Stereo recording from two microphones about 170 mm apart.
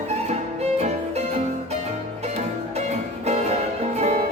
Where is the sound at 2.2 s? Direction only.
40° right (ahead or behind).